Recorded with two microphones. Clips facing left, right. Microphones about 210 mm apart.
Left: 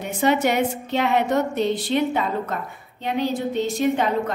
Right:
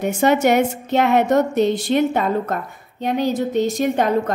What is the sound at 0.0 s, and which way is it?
A woman's voice, 45° right (ahead or behind).